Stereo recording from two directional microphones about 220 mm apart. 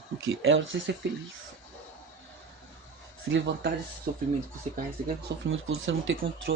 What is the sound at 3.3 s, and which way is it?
Speech, 55° right (ahead or behind).